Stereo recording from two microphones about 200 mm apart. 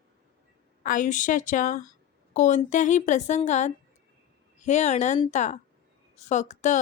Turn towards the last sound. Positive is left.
turn(degrees=35)  # may be behind; listen again after turning